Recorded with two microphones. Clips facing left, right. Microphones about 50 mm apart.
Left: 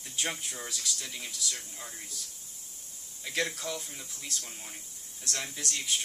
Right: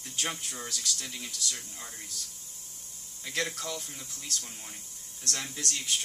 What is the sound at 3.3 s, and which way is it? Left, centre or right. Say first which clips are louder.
Speech: left 1 dB; centre.